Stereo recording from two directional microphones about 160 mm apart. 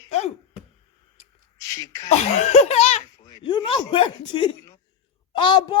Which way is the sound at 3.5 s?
30° left (ahead or behind).